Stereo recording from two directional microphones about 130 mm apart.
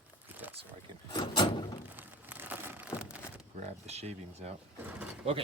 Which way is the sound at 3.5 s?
55° right (ahead or behind).